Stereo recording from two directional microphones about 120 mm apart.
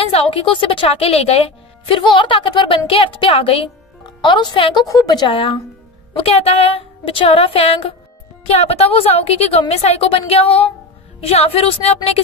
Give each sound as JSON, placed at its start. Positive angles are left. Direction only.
{"t": 0.0, "sound": "a woman's voice", "side_deg": 50}
{"t": 4.3, "sound": "a woman's voice", "side_deg": 40}
{"t": 5.3, "sound": "a woman's voice", "side_deg": 45}